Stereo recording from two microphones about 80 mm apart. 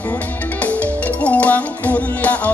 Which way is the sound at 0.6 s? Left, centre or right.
Centre.